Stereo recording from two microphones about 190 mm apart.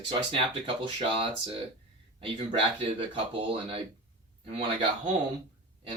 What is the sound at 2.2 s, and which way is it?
Speech, 25° right (ahead or behind).